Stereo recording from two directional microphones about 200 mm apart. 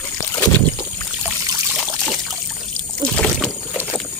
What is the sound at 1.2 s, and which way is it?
Trickle, 5° right (ahead or behind).